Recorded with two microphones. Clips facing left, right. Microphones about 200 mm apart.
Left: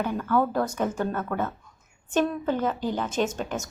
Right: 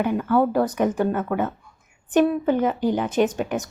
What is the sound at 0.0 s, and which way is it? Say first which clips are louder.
A woman's voice: right 5 dB; 15° right (ahead or behind).